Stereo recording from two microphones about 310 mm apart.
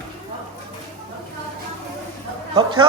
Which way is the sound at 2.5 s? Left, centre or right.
Centre.